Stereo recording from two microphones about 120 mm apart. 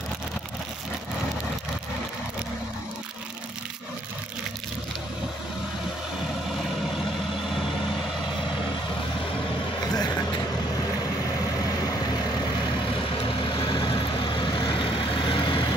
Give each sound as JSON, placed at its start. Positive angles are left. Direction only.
{"t": 9.8, "sound": "vehicle", "side_deg": 35}
{"t": 13.2, "sound": "vehicle", "side_deg": 45}